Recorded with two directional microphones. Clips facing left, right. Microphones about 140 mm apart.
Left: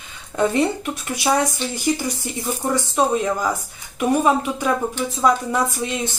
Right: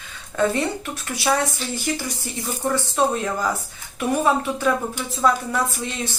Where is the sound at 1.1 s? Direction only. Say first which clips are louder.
Left 1 dB; 20° left (ahead or behind).